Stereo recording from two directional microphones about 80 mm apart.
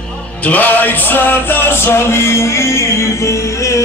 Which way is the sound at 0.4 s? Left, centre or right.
Centre.